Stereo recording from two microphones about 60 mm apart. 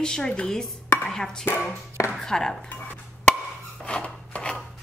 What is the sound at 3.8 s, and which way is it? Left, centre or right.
Chopping, centre.